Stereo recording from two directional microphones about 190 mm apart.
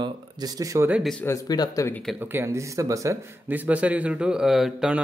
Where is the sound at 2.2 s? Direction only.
10° right (ahead or behind).